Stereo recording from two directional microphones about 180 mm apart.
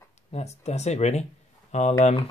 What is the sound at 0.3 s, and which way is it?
Speech, 35° left (ahead or behind).